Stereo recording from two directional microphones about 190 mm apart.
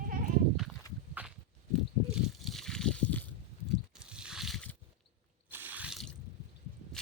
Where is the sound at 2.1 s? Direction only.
Centre (ahead or behind).